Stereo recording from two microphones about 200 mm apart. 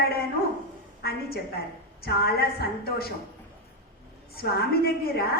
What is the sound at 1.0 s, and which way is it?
A woman's voice, 50° left (ahead or behind).